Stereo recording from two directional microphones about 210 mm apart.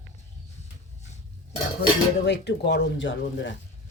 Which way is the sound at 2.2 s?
55° left (ahead or behind).